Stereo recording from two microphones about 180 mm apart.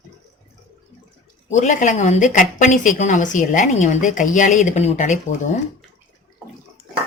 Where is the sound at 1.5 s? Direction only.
40° left (ahead or behind).